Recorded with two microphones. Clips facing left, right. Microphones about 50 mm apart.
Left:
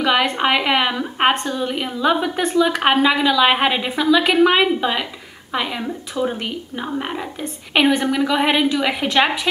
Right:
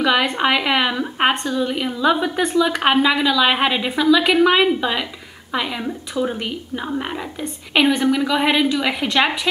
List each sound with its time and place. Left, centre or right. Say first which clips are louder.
0.0 s a woman's voice: even; centre
1.4 s a woman's voice: right 2 dB; centre
1.7 s a woman's voice: left 1 dB; centre